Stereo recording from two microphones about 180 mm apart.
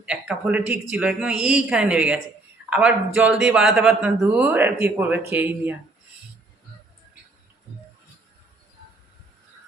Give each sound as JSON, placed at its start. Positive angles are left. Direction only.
{"t": 0.0, "sound": "speech", "side_deg": -5}